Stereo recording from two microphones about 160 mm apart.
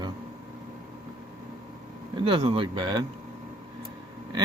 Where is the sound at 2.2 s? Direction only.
35° right (ahead or behind).